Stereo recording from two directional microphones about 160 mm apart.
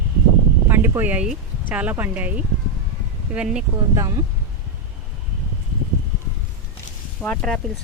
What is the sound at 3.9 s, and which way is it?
Speech, 20° right (ahead or behind).